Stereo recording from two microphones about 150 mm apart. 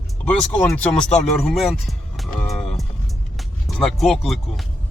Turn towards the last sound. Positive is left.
turn(degrees=0)  # may be behind; listen again after turning